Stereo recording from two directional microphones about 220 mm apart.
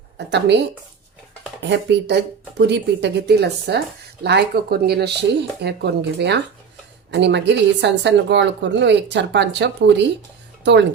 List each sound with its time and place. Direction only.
0.2 s speech: 50° right (ahead or behind)